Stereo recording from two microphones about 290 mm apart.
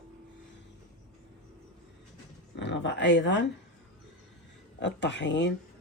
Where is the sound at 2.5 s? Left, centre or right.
Left.